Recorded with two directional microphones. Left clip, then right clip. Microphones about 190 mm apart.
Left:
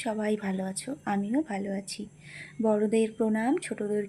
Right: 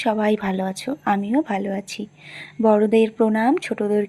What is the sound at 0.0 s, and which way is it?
Speech, 20° right (ahead or behind).